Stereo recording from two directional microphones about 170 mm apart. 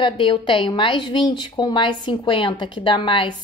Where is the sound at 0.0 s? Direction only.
30° left (ahead or behind).